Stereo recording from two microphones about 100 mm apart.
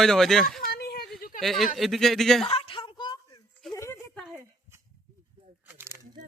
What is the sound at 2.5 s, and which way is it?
Speech, 65° left (ahead or behind).